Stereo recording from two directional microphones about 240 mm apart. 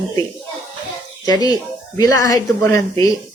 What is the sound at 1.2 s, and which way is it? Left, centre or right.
A woman's voice, centre.